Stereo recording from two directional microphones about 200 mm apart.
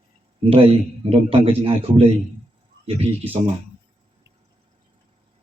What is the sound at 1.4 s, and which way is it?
Speech, 30° right (ahead or behind).